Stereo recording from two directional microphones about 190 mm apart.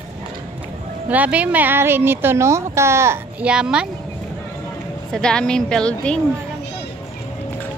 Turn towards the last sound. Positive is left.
turn(degrees=5)  # may be behind; listen again after turning